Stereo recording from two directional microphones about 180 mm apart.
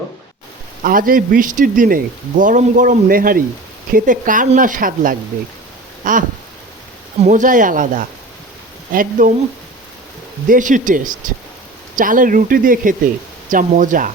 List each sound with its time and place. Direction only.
0.8 s speech: 50° right (ahead or behind)
6.0 s a sound: 50° right (ahead or behind)
7.2 s speech: 45° right (ahead or behind)
10.5 s speech: 45° right (ahead or behind)